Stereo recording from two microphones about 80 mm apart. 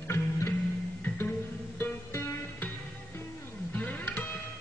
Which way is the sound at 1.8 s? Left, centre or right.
Left.